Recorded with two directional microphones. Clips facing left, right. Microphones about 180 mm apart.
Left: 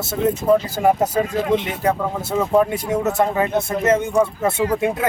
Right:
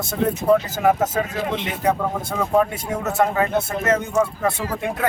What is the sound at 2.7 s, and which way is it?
Speech, 20° left (ahead or behind).